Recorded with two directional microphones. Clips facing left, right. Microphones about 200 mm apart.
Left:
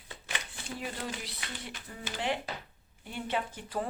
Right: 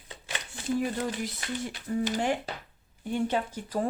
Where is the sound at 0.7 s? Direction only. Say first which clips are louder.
Right 8 dB; 45° right (ahead or behind).